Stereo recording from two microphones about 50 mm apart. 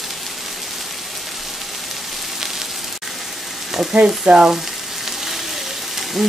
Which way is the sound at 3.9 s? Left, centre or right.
Right.